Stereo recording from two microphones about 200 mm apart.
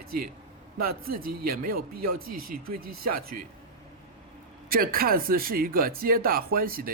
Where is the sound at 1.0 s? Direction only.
45° right (ahead or behind).